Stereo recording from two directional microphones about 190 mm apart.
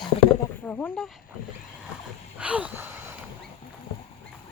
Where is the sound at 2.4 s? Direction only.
5° right (ahead or behind).